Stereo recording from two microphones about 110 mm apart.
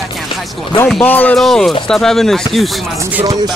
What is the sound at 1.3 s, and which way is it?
Speech, centre (ahead or behind).